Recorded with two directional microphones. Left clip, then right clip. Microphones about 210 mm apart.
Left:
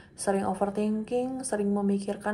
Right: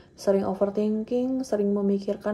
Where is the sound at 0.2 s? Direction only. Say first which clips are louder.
Right 4 dB; 25° right (ahead or behind).